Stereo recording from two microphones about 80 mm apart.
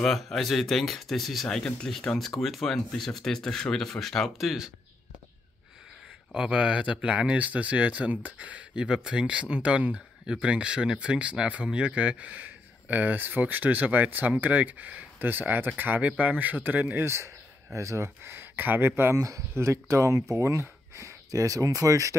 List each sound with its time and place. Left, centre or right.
0.0 s speech: centre
6.3 s speech: centre; by 19.1 s right
19.1 s speech: right